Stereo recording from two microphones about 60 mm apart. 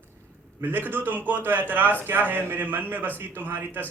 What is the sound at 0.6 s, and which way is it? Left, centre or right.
A man's voice, right.